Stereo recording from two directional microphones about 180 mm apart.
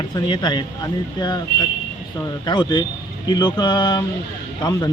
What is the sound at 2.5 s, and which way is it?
Speech, 25° left (ahead or behind).